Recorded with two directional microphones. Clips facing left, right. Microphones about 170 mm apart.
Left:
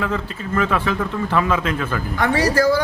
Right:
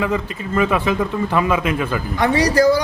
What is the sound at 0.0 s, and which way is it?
A man's voice, 15° right (ahead or behind).